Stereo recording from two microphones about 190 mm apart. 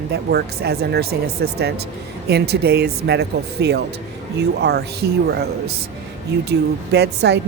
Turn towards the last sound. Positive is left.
turn(degrees=-60)  # may be behind; listen again after turning